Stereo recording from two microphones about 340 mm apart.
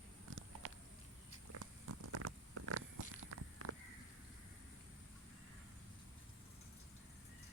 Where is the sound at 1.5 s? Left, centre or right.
Right.